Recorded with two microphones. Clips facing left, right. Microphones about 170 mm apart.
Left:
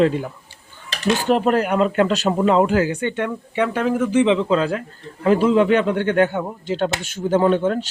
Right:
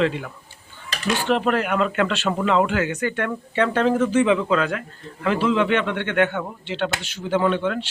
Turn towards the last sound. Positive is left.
turn(degrees=40)  # may be behind; listen again after turning